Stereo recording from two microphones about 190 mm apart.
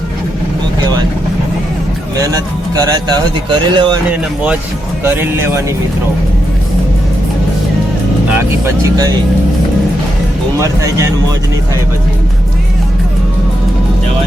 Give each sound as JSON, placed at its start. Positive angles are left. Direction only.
{"t": 2.7, "sound": "speech", "side_deg": -20}
{"t": 5.0, "sound": "speech", "side_deg": -10}
{"t": 8.4, "sound": "speech", "side_deg": -15}
{"t": 10.6, "sound": "speech", "side_deg": -15}